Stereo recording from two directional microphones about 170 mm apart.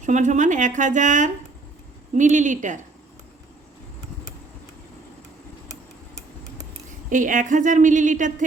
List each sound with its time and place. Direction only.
0.0 s speech: 45° right (ahead or behind)
7.1 s speech: 50° right (ahead or behind)